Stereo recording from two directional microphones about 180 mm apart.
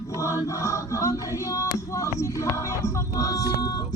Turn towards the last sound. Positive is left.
turn(degrees=20)  # may be behind; listen again after turning